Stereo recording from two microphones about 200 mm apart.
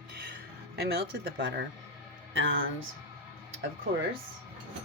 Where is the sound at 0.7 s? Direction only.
50° right (ahead or behind).